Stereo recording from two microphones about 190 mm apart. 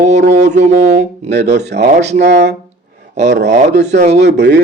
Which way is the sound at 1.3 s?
65° right (ahead or behind).